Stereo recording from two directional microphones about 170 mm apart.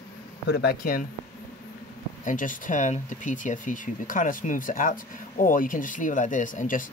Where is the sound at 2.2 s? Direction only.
50° left (ahead or behind).